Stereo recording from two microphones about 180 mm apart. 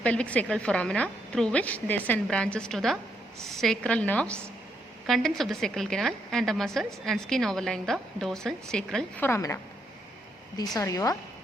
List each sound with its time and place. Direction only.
0.0 s a woman's voice: 5° left (ahead or behind)
9.3 s a woman's voice: 15° left (ahead or behind)
10.6 s a woman's voice: 20° left (ahead or behind)